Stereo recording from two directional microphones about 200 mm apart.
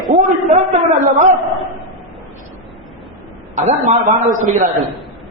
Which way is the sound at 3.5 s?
35° right (ahead or behind).